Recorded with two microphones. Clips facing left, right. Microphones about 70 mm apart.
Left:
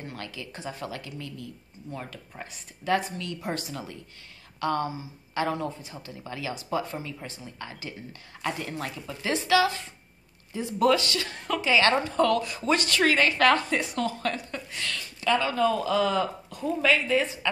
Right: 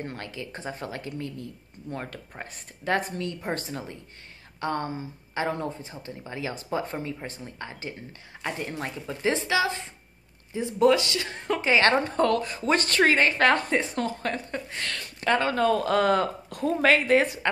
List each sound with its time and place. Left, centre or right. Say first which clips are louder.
0.0 s a woman's voice: right 3 dB; right
6.5 s a woman's voice: left 1 dB; right
7.6 s speech: right 1 dB; right
11.6 s a woman's voice: right 1 dB; right